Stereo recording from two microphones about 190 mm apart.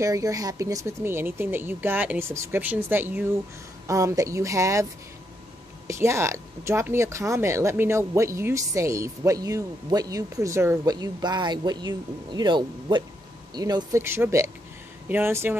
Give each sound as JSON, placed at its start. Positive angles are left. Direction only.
{"t": 0.0, "sound": "speech", "side_deg": -15}
{"t": 5.9, "sound": "speech", "side_deg": -15}